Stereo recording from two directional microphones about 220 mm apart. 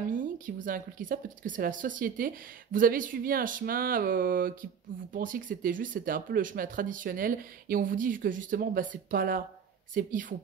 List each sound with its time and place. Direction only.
0.7 s speech: 40° right (ahead or behind)